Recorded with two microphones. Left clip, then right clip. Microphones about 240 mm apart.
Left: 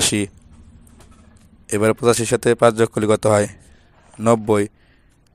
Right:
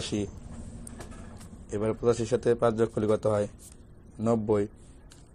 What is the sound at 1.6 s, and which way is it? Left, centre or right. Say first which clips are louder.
Speech: left 10 dB; left.